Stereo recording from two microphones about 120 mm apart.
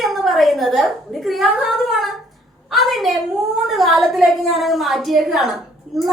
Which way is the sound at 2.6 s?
Centre (ahead or behind).